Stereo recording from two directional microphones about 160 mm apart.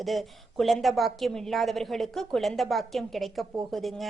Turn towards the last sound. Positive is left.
turn(degrees=0)  # may be behind; listen again after turning